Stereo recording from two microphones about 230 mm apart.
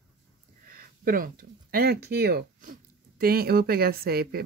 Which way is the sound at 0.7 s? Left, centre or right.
Right.